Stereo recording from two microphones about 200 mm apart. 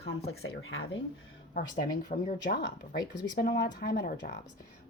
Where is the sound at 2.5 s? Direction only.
55° left (ahead or behind).